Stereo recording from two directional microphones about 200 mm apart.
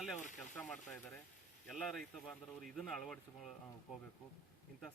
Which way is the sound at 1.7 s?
5° left (ahead or behind).